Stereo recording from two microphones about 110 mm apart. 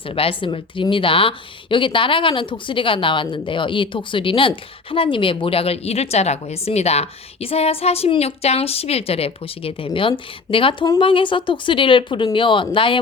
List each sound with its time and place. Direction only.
0.1 s speech: 55° left (ahead or behind)